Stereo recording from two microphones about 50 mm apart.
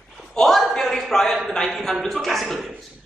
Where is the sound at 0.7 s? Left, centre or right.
Centre.